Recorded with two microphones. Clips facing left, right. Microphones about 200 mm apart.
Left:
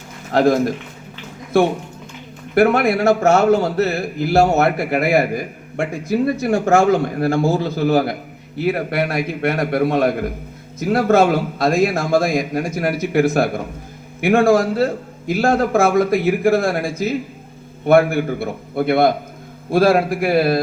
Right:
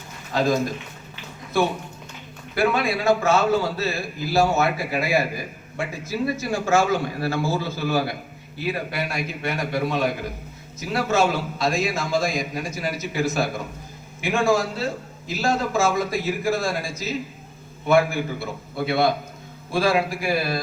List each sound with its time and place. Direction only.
0.3 s a man's voice: 60° left (ahead or behind)
2.6 s a man's voice: 60° left (ahead or behind)